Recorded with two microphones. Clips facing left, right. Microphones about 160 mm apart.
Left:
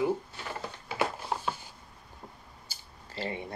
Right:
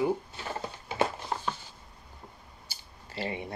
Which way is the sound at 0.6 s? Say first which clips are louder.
Right 3 dB; 20° right (ahead or behind).